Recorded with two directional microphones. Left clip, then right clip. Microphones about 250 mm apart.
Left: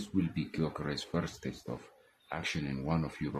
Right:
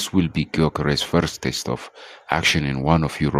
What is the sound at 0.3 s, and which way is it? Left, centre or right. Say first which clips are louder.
Speech: right 15 dB; right.